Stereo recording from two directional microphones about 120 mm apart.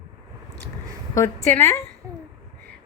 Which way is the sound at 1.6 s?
25° left (ahead or behind).